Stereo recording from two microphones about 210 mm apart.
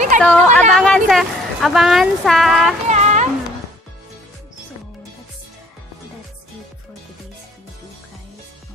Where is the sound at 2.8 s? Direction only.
35° right (ahead or behind).